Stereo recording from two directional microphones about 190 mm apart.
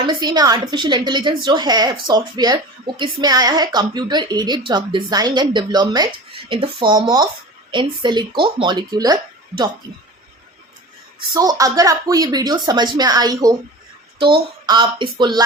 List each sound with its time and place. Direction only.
0.0 s a woman's voice: 25° right (ahead or behind)
11.3 s a woman's voice: 20° right (ahead or behind)
14.7 s a woman's voice: 25° right (ahead or behind)